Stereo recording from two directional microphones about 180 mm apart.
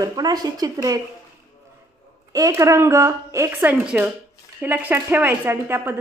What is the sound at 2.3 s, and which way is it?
A woman's voice, 20° right (ahead or behind).